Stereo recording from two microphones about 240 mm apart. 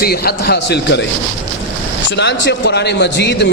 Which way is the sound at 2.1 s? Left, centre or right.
Left.